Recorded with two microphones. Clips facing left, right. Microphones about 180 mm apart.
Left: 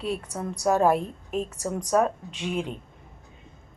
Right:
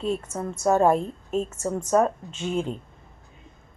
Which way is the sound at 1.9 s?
Centre (ahead or behind).